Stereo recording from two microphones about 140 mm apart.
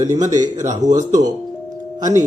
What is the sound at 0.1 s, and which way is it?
Speech, 60° right (ahead or behind).